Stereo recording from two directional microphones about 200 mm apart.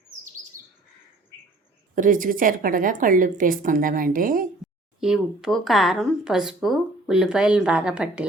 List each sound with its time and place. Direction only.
2.0 s a woman's voice: 45° right (ahead or behind)
4.9 s speech: 5° right (ahead or behind)